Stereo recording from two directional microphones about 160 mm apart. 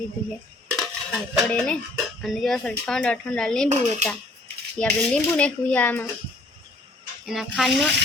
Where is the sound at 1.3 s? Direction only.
5° left (ahead or behind).